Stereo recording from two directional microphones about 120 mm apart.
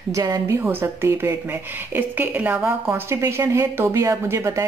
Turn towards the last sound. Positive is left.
turn(degrees=-25)  # may be behind; listen again after turning